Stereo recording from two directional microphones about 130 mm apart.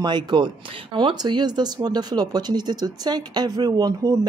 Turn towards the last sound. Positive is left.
turn(degrees=-30)  # may be behind; listen again after turning